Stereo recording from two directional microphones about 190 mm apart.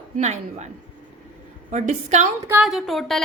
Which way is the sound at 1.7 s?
40° right (ahead or behind).